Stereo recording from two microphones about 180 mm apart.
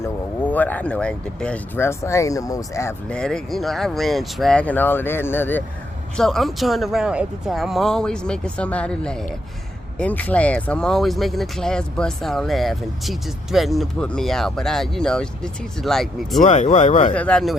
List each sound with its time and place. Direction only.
0.0 s speech: 10° left (ahead or behind)
3.1 s speech: 5° left (ahead or behind)
16.4 s speech: 40° left (ahead or behind)
17.2 s speech: 5° left (ahead or behind)